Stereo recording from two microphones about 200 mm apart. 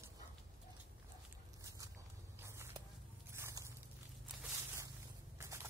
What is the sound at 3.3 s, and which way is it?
Biting, 15° right (ahead or behind).